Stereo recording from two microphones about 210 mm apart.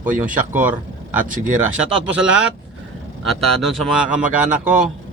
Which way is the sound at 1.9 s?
5° right (ahead or behind).